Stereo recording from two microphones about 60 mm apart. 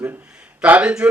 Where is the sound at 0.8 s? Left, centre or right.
Centre.